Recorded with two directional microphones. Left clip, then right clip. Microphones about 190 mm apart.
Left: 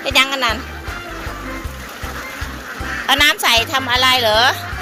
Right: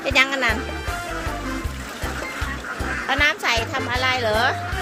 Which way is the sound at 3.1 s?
10° left (ahead or behind).